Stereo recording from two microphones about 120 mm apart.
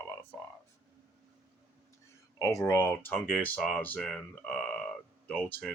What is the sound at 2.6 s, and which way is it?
Speech, 25° left (ahead or behind).